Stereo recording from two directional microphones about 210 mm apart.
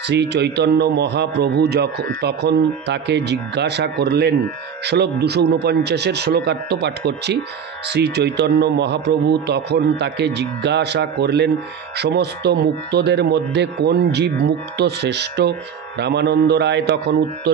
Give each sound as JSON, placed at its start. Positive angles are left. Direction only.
{"t": 0.1, "sound": "a man's voice", "side_deg": -55}